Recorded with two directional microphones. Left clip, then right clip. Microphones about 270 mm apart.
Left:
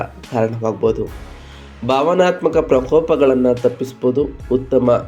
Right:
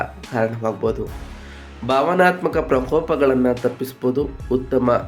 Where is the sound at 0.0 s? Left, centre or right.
Centre.